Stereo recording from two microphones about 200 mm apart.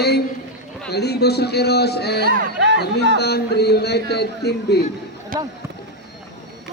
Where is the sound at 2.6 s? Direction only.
60° right (ahead or behind).